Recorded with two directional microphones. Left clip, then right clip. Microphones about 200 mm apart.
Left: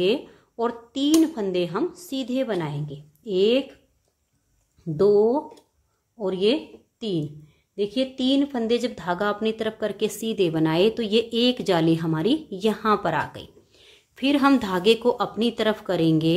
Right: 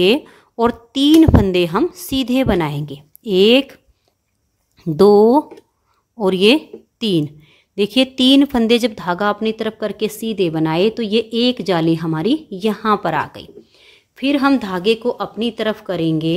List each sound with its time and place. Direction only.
0.0 s a woman's voice: 40° right (ahead or behind); by 16.3 s 10° right (ahead or behind)